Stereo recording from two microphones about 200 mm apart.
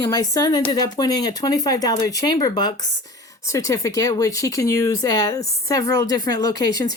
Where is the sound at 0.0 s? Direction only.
20° left (ahead or behind).